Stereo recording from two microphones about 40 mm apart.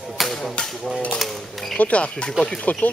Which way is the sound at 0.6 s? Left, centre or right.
Left.